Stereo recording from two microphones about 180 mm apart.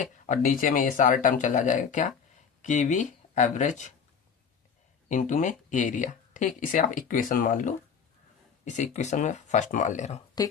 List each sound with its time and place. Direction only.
0.3 s speech: 45° left (ahead or behind)
5.0 s speech: 45° left (ahead or behind)
10.4 s speech: 20° left (ahead or behind)